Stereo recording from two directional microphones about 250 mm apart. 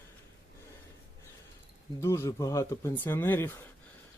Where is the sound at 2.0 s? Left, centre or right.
Centre.